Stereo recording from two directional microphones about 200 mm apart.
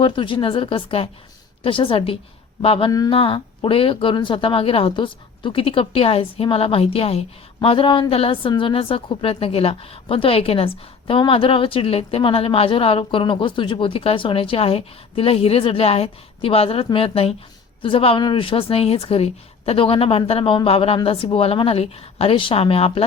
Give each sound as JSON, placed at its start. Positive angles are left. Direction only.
{"t": 0.0, "sound": "speech", "side_deg": 25}